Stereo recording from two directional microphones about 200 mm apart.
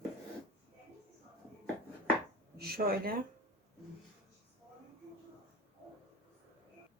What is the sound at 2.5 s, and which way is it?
Speech, 50° right (ahead or behind).